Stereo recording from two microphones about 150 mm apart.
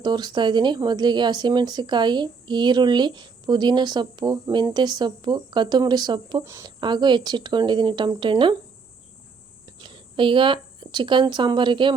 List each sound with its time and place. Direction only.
0.0 s a woman's voice: 30° right (ahead or behind)
6.4 s a woman's voice: 20° right (ahead or behind)
6.7 s a woman's voice: 30° right (ahead or behind)
9.7 s speech: 35° right (ahead or behind)